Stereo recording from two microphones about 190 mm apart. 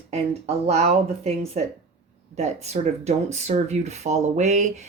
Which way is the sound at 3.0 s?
35° right (ahead or behind).